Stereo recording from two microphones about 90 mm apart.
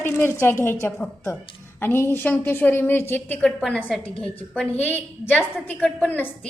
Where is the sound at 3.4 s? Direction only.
10° left (ahead or behind).